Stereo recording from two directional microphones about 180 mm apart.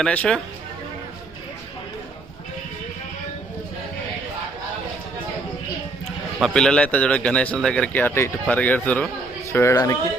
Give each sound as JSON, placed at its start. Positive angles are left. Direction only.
{"t": 0.0, "sound": "speech", "side_deg": 5}
{"t": 6.4, "sound": "a man's voice", "side_deg": 5}